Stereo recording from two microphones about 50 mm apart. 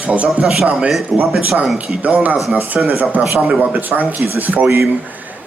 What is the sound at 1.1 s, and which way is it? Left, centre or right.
Speech, centre.